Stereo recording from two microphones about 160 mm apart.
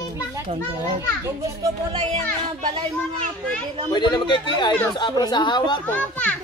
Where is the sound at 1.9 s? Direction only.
40° right (ahead or behind).